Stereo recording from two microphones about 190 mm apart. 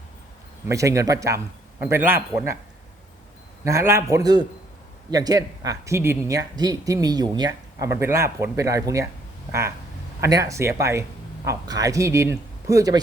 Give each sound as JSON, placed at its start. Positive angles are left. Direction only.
{"t": 0.7, "sound": "speech", "side_deg": -15}
{"t": 3.6, "sound": "speech", "side_deg": -15}